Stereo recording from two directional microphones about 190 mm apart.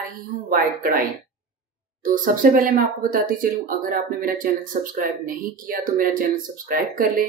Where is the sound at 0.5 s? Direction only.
50° right (ahead or behind).